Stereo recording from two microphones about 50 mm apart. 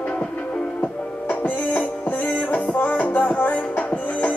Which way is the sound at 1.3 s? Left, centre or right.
Left.